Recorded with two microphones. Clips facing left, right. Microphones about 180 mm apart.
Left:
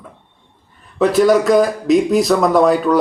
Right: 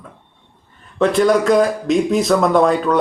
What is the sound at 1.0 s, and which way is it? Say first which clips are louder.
Speech: left 2 dB; 5° left (ahead or behind).